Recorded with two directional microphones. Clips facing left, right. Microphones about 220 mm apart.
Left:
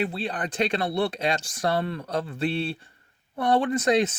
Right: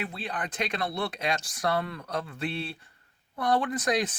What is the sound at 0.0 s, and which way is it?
Speech, 30° left (ahead or behind).